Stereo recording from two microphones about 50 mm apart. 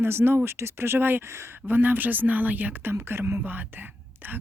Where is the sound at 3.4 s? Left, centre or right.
Right.